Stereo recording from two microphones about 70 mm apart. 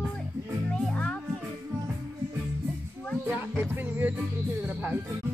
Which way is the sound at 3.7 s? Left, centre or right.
Right.